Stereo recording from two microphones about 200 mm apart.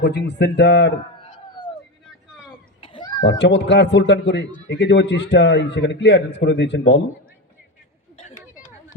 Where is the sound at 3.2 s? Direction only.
65° left (ahead or behind).